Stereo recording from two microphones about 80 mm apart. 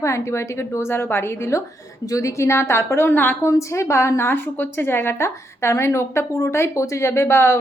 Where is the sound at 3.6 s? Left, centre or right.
Left.